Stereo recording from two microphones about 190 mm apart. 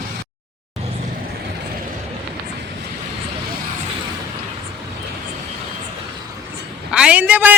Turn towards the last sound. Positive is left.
turn(degrees=-10)  # may be behind; listen again after turning